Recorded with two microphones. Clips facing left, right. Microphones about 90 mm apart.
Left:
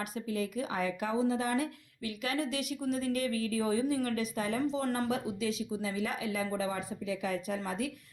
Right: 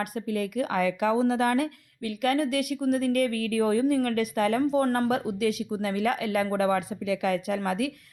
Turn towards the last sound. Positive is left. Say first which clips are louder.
# right 7 dB
turn(degrees=-75)  # may be behind; listen again after turning